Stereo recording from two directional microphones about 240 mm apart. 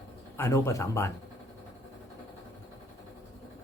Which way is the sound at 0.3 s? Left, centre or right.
Centre.